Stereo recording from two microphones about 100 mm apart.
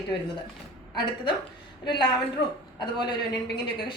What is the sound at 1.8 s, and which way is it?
A woman's voice, 55° left (ahead or behind).